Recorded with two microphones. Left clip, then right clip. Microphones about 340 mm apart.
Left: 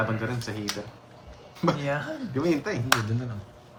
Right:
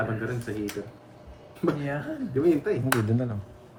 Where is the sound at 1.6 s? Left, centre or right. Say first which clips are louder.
Left 2 dB; left.